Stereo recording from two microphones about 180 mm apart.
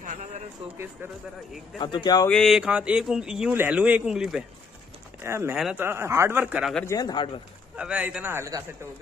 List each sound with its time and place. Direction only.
0.0 s a sound: 45° right (ahead or behind)
0.7 s speech: 10° right (ahead or behind)
1.8 s speech: 25° left (ahead or behind)
2.2 s a man's voice: centre (ahead or behind)
5.2 s speech: 15° right (ahead or behind)
5.6 s a man's voice: centre (ahead or behind)
5.9 s speech: 15° right (ahead or behind)
6.7 s a man's voice: 10° left (ahead or behind)
7.0 s speech: 25° left (ahead or behind)
7.7 s speech: 5° right (ahead or behind)